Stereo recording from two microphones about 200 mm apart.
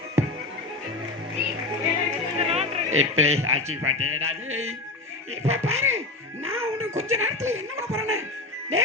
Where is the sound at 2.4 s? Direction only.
30° right (ahead or behind).